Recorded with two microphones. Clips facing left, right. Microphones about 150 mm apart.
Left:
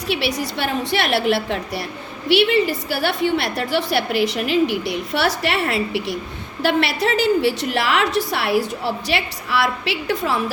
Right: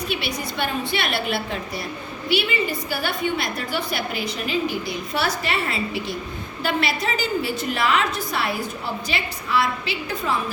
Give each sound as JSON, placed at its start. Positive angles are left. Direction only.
{"t": 0.1, "sound": "a woman's voice", "side_deg": 75}